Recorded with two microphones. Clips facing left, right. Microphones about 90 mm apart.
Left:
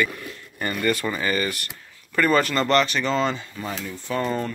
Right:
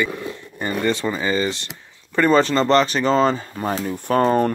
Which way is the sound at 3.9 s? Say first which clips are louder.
Right 9 dB; 55° right (ahead or behind).